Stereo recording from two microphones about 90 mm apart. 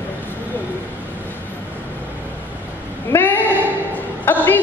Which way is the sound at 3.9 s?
20° left (ahead or behind).